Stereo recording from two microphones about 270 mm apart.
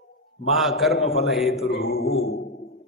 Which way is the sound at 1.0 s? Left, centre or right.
Left.